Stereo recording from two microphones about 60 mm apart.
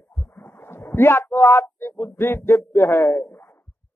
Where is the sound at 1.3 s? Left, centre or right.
Left.